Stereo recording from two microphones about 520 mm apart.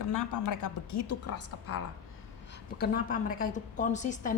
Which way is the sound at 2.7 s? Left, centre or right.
Centre.